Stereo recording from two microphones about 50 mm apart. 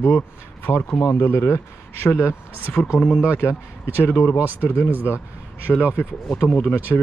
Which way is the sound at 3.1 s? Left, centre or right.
Right.